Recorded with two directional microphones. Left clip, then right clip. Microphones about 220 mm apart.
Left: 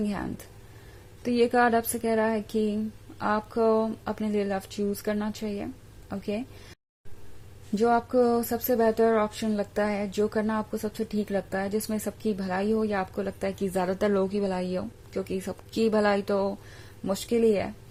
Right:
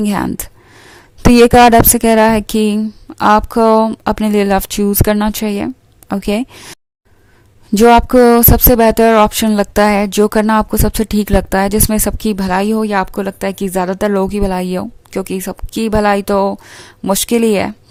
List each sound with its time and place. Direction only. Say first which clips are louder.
0.0 s speech: right 15 dB; 40° right (ahead or behind)
7.8 s speech: right 16 dB; 45° right (ahead or behind)